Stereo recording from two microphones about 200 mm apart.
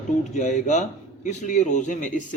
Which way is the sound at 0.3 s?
35° left (ahead or behind).